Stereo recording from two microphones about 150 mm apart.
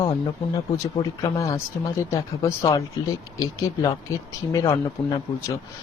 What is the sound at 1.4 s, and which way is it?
Speech, 20° left (ahead or behind).